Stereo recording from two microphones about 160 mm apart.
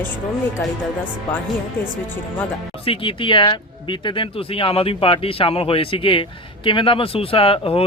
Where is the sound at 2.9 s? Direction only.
35° left (ahead or behind).